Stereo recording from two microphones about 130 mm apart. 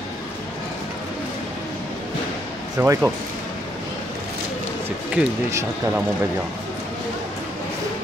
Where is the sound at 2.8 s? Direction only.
15° right (ahead or behind).